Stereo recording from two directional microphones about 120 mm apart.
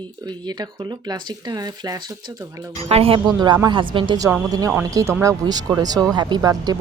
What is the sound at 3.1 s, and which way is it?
Speech, 35° right (ahead or behind).